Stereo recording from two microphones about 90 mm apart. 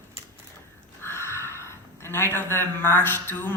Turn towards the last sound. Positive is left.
turn(degrees=25)  # may be behind; listen again after turning